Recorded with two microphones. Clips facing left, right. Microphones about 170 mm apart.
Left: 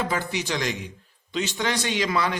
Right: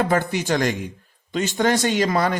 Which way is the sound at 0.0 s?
50° right (ahead or behind).